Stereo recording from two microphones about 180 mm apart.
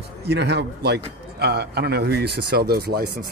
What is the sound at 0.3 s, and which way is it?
A man's voice, 70° right (ahead or behind).